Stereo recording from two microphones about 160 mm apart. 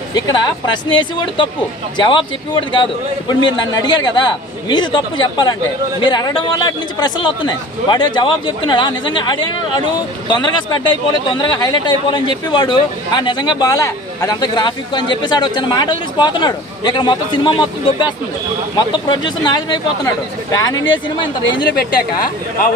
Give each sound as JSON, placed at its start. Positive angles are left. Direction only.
{"t": 0.8, "sound": "a man's voice", "side_deg": 30}
{"t": 21.6, "sound": "speech", "side_deg": 70}